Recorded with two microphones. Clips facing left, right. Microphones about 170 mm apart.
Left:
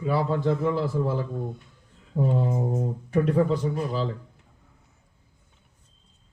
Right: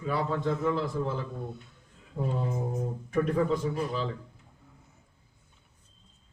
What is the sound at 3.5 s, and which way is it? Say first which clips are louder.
Speech: left 3 dB; 35° left (ahead or behind).